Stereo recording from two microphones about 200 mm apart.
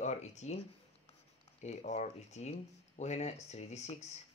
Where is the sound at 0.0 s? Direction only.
35° left (ahead or behind).